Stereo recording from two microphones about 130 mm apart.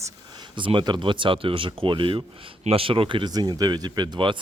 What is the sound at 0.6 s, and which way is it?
Speech, 40° right (ahead or behind).